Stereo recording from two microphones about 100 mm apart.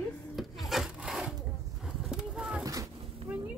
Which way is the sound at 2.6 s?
35° right (ahead or behind).